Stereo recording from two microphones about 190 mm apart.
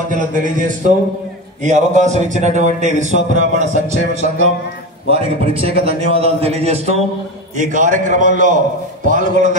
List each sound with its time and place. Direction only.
0.1 s a man's voice: 45° right (ahead or behind)